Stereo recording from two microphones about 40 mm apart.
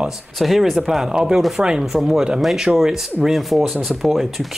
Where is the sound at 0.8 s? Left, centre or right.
Centre.